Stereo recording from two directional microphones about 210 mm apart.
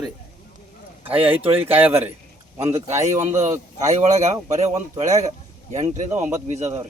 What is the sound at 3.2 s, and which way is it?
Speech, 35° right (ahead or behind).